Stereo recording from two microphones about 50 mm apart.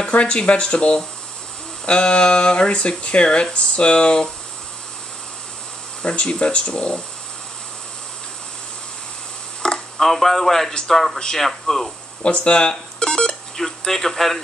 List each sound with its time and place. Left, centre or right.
0.0 s speech: centre
6.0 s speech: left
9.6 s a sound: centre
10.0 s speech: centre
12.3 s speech: left; by 14.4 s centre